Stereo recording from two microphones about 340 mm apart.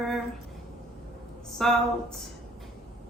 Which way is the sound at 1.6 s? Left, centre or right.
Centre.